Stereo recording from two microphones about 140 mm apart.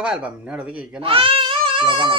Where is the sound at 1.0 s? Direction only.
40° right (ahead or behind).